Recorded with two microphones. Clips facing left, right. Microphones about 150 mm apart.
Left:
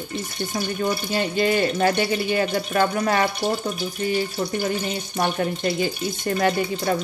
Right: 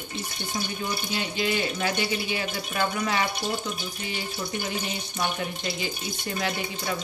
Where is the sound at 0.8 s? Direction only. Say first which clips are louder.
Left 7 dB; 45° left (ahead or behind).